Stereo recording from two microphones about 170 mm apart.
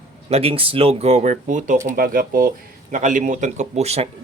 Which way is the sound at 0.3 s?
35° right (ahead or behind).